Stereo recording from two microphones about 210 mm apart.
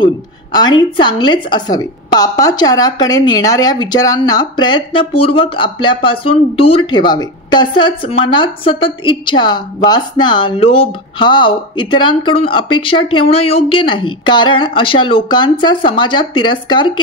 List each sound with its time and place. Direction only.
0.0 s speech: 20° left (ahead or behind)